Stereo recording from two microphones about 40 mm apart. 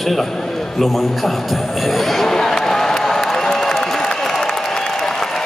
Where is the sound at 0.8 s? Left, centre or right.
Centre.